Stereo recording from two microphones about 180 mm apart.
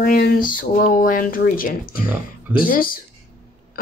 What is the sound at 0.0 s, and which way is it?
Speech, 60° left (ahead or behind).